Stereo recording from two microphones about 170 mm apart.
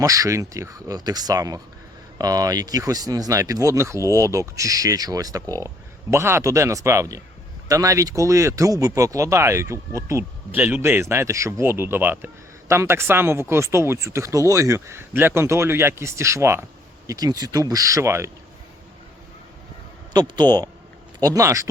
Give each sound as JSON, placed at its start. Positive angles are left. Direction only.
{"t": 0.0, "sound": "a man's voice", "side_deg": -20}
{"t": 20.1, "sound": "speech", "side_deg": -25}